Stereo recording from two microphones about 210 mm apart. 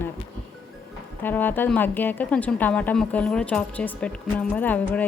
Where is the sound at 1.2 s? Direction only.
10° left (ahead or behind).